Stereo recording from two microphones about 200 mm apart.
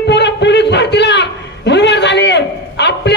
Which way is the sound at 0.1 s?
60° left (ahead or behind).